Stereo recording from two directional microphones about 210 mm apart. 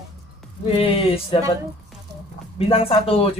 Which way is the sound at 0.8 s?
25° left (ahead or behind).